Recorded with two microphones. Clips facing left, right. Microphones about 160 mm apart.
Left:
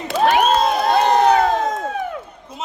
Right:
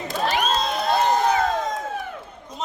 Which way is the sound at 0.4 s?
50° left (ahead or behind).